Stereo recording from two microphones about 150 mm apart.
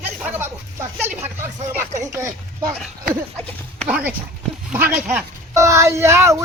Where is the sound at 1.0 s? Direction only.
15° right (ahead or behind).